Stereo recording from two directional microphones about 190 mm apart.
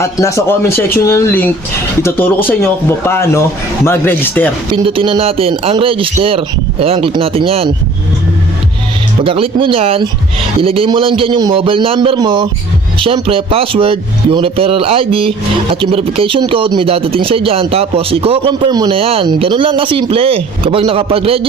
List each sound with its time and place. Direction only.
0.0 s a man's voice: 15° left (ahead or behind)
4.8 s speech: 30° right (ahead or behind)
9.2 s speech: 30° right (ahead or behind)